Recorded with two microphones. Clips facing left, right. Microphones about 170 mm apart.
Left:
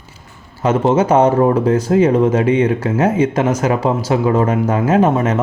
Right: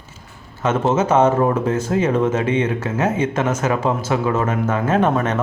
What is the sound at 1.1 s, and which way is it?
Speech, 15° left (ahead or behind).